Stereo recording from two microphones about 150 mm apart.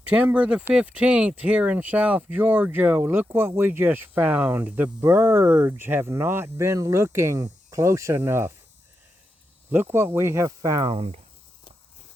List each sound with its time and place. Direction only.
0.0 s speech: 10° right (ahead or behind)
9.7 s speech: 15° right (ahead or behind)
10.9 s speech: 40° right (ahead or behind)